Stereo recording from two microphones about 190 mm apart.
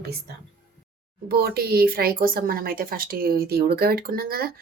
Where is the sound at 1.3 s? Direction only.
55° right (ahead or behind).